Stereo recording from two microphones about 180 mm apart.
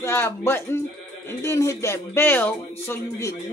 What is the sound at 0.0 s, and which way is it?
Speech, 15° left (ahead or behind).